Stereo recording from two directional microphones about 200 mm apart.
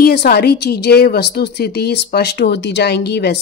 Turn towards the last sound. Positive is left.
turn(degrees=55)  # may be behind; listen again after turning